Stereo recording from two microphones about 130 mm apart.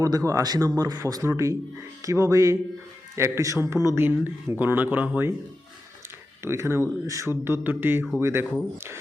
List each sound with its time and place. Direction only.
0.0 s speech: 25° right (ahead or behind)
6.4 s speech: 20° right (ahead or behind)